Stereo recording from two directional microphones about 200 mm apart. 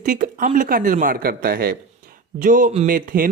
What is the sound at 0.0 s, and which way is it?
Speech, 40° right (ahead or behind).